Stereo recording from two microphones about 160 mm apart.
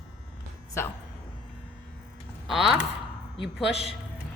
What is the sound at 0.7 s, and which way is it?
Speech, 15° left (ahead or behind).